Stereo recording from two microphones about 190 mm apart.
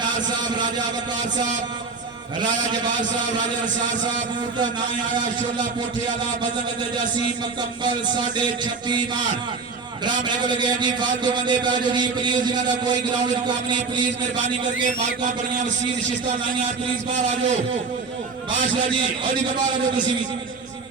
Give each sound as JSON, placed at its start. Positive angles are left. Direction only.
{"t": 0.0, "sound": "a sound", "side_deg": -25}
{"t": 10.2, "sound": "a man's voice", "side_deg": -25}
{"t": 14.4, "sound": "a man's voice", "side_deg": -40}